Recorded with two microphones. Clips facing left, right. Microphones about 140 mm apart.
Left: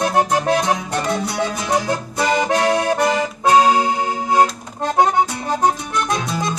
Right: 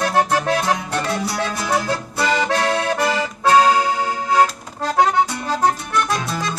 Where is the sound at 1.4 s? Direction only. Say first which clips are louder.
Left 2 dB; 15° left (ahead or behind).